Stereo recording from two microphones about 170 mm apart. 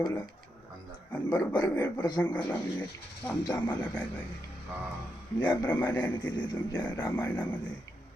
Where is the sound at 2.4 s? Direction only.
10° left (ahead or behind).